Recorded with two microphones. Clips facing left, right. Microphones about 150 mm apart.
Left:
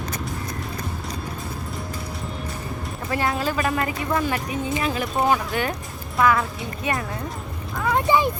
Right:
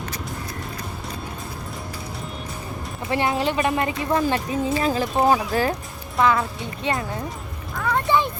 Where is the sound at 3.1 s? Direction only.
25° right (ahead or behind).